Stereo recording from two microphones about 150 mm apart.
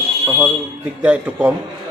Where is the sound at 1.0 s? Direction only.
10° right (ahead or behind).